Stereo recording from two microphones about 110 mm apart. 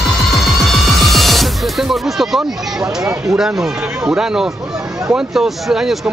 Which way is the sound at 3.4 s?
5° right (ahead or behind).